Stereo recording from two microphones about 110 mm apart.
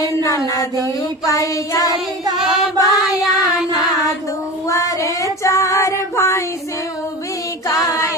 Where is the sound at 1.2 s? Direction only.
30° left (ahead or behind).